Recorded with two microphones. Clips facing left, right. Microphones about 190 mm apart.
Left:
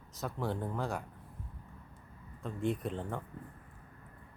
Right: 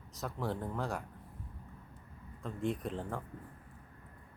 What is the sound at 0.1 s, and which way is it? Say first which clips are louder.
Speech: left 1 dB; centre (ahead or behind).